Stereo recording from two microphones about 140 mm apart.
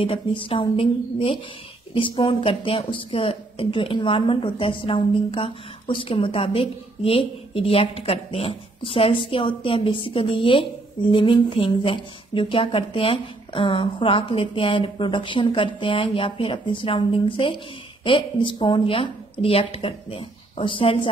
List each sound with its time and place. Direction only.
0.0 s a woman's voice: 40° left (ahead or behind)